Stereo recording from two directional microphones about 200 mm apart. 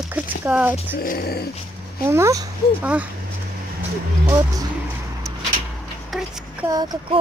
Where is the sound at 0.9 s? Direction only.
50° left (ahead or behind).